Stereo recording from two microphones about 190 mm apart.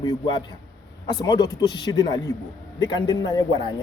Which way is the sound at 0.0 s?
25° left (ahead or behind).